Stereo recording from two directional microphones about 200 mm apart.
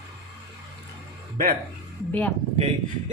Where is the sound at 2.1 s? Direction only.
5° left (ahead or behind).